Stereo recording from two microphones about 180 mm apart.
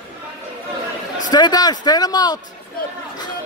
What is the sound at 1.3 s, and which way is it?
A man's voice, 20° left (ahead or behind).